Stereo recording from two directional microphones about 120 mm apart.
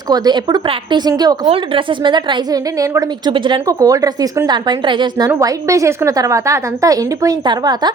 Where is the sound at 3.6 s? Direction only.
30° right (ahead or behind).